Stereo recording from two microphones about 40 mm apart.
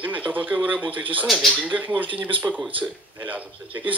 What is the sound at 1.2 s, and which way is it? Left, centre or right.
Speech, centre.